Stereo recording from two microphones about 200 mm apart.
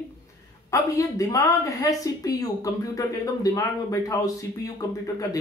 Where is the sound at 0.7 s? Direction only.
15° left (ahead or behind).